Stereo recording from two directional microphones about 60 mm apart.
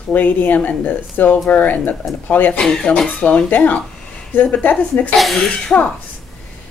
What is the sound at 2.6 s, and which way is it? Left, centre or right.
Speech, centre.